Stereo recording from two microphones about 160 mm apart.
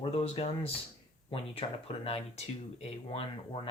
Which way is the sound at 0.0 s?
40° left (ahead or behind).